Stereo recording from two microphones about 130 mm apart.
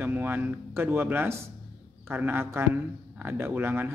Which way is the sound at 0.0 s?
15° right (ahead or behind).